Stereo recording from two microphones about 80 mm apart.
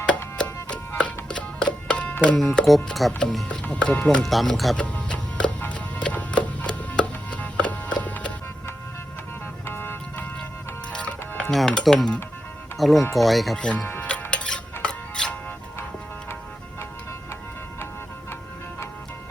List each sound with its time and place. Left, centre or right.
0.4 s music: centre
2.3 s speech: centre
4.2 s speech: centre
4.8 s music: centre
9.6 s vehicle: left
10.9 s music: centre
11.5 s speech: centre
13.8 s music: centre